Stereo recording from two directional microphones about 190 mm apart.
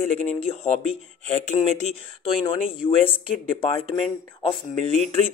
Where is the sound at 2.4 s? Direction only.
25° left (ahead or behind).